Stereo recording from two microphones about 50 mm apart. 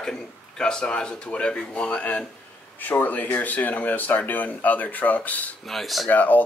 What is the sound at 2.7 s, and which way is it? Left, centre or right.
Speech, left.